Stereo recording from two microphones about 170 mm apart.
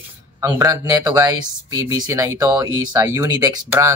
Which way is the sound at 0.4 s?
20° right (ahead or behind).